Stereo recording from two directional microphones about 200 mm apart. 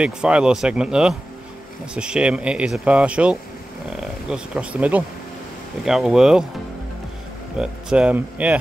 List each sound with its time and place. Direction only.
0.0 s speech: 5° right (ahead or behind)
7.5 s speech: 5° right (ahead or behind)